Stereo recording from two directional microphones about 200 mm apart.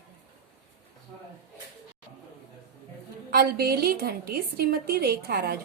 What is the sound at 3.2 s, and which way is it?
A woman's voice, 50° right (ahead or behind).